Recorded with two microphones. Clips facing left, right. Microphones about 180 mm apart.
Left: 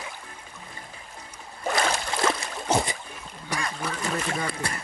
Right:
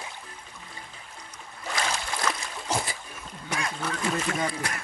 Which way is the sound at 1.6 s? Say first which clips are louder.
Left 6 dB; 55° left (ahead or behind).